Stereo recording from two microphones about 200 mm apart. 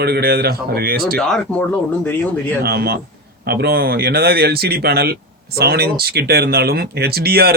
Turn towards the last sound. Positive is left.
turn(degrees=-50)  # may be behind; listen again after turning